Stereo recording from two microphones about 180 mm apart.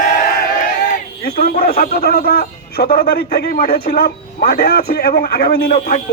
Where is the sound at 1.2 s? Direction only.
55° left (ahead or behind).